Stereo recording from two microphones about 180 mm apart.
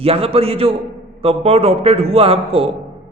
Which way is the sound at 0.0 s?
30° right (ahead or behind).